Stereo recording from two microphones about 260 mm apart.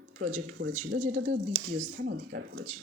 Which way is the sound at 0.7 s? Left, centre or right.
Right.